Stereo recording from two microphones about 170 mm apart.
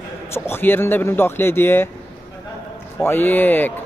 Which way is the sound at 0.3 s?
15° left (ahead or behind).